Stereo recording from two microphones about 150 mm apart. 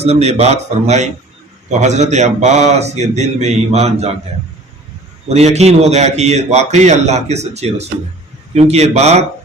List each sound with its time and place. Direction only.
0.0 s a man's voice: 45° right (ahead or behind)
5.3 s a man's voice: 45° right (ahead or behind)